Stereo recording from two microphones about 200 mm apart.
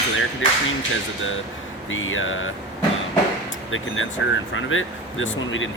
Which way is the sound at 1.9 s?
80° left.